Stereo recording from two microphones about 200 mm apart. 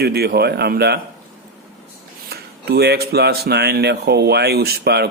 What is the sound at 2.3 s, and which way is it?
Speech, 55° right (ahead or behind).